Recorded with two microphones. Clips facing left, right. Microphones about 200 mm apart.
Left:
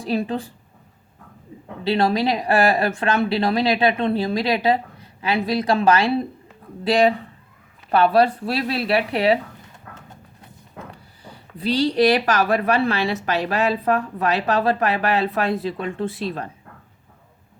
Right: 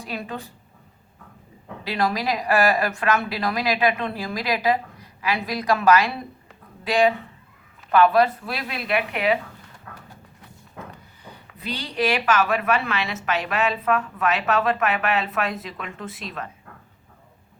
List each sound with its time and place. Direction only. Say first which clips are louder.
0.0 s speech: left 9 dB; 30° left (ahead or behind)
1.8 s speech: left 5 dB; 30° left (ahead or behind)
10.9 s speech: left 1 dB; 30° left (ahead or behind)